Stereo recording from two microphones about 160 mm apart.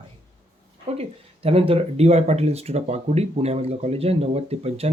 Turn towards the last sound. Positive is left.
turn(degrees=-40)  # may be behind; listen again after turning